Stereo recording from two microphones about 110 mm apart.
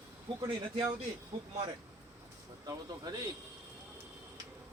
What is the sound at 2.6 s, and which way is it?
Speech, 35° right (ahead or behind).